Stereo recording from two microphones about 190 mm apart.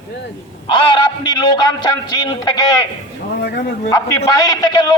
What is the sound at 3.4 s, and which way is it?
Speech, 55° left (ahead or behind).